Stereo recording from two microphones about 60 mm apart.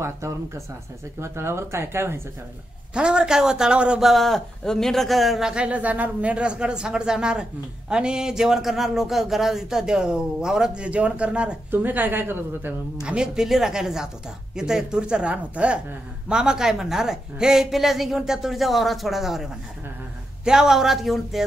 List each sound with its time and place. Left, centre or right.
1.2 s speech: right
2.9 s speech: centre
4.0 s speech: centre
5.5 s speech: right
11.7 s a woman's voice: right
13.0 s speech: centre
20.4 s speech: centre